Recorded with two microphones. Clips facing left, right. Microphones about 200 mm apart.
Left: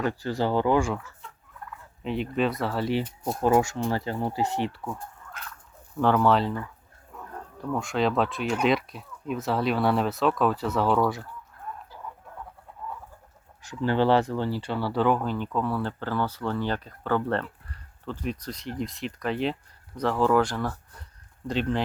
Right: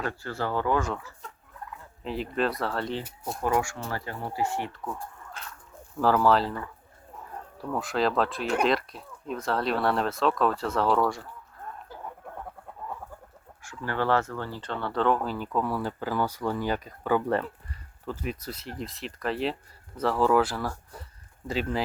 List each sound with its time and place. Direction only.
0.0 s speech: 15° left (ahead or behind)
1.2 s fowl: 40° right (ahead or behind)
2.0 s speech: centre (ahead or behind)
3.4 s speech: 25° left (ahead or behind)
5.4 s speech: 30° right (ahead or behind)
6.0 s speech: centre (ahead or behind)
7.6 s speech: centre (ahead or behind)
13.6 s speech: 20° left (ahead or behind); by 21.8 s 5° right (ahead or behind)